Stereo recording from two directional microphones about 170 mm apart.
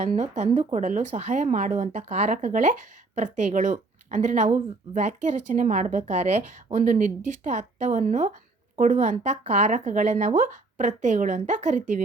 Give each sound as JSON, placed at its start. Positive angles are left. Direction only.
{"t": 0.0, "sound": "speech", "side_deg": -45}